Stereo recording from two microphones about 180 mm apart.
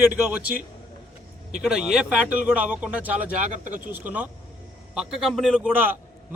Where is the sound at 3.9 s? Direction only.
10° right (ahead or behind).